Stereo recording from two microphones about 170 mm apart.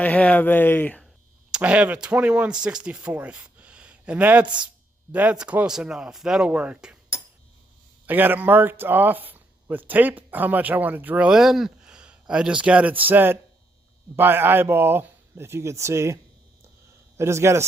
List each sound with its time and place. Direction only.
0.0 s speech: 10° left (ahead or behind)
1.5 s speech: 5° right (ahead or behind)
8.0 s speech: 10° right (ahead or behind)
17.2 s speech: 15° right (ahead or behind)